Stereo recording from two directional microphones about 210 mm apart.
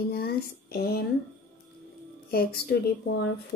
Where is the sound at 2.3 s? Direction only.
45° left (ahead or behind).